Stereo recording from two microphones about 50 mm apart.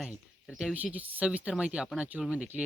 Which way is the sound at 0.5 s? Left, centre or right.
Centre.